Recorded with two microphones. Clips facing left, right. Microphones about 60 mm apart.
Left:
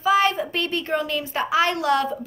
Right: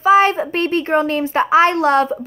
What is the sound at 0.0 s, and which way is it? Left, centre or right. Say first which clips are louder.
A woman's voice: right 7 dB; right.